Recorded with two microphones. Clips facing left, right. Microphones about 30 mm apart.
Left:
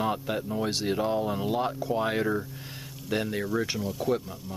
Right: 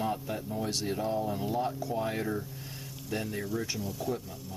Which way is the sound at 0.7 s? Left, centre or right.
Left.